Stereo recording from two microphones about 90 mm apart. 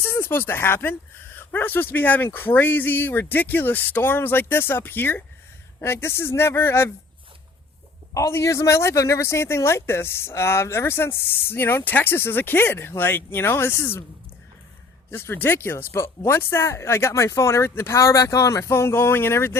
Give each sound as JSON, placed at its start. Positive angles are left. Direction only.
{"t": 0.0, "sound": "speech", "side_deg": 25}
{"t": 8.1, "sound": "speech", "side_deg": 30}
{"t": 15.1, "sound": "speech", "side_deg": 25}